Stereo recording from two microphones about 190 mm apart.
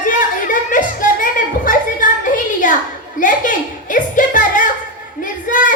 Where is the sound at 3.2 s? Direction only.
45° left (ahead or behind).